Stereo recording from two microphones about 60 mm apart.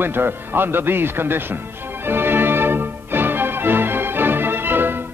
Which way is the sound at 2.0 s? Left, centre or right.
Right.